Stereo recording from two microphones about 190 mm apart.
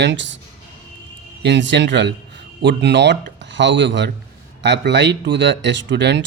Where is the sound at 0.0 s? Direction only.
70° right (ahead or behind).